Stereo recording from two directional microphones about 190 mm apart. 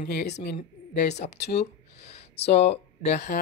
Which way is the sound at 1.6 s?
35° left (ahead or behind).